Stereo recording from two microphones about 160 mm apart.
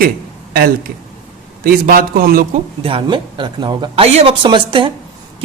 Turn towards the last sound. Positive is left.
turn(degrees=-30)  # may be behind; listen again after turning